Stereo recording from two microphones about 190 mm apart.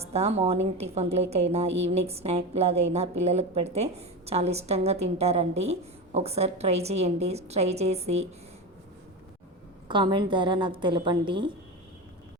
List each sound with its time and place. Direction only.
0.0 s a woman's voice: 35° right (ahead or behind)
9.9 s a woman's voice: 25° right (ahead or behind)